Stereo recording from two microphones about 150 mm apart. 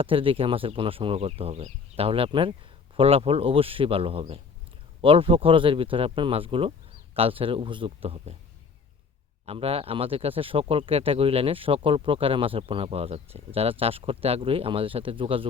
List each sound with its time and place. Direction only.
0.0 s speech: 35° right (ahead or behind)
9.5 s speech: 40° right (ahead or behind)